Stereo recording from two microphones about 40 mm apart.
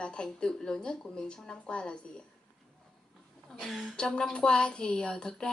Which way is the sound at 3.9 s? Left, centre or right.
Left.